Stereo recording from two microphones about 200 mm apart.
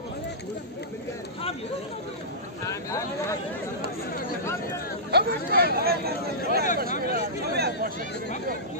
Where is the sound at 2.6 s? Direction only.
15° left (ahead or behind).